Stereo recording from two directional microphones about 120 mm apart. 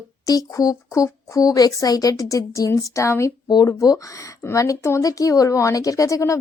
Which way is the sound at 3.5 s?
35° left (ahead or behind).